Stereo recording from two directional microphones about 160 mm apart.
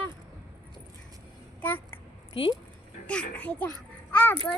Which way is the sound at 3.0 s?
10° left (ahead or behind).